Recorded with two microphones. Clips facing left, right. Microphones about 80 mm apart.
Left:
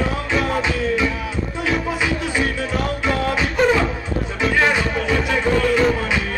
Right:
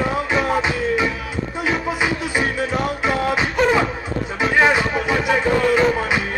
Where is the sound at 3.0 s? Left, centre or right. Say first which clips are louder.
Right 1 dB; centre.